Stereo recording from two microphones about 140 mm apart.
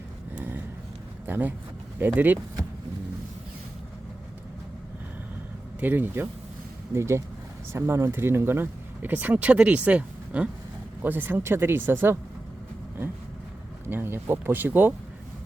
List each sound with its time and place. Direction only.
0.3 s vehicle: 15° right (ahead or behind)
1.3 s speech: 15° right (ahead or behind)
5.8 s speech: 15° right (ahead or behind)
13.9 s speech: 15° right (ahead or behind)